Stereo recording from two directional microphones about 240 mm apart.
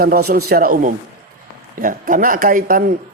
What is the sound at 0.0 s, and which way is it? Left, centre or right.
Speech, right.